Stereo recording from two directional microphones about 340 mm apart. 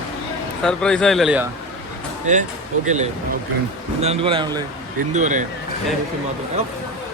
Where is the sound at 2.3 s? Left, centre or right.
Right.